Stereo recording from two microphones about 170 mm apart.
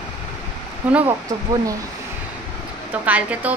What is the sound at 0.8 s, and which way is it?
Speech, 10° right (ahead or behind).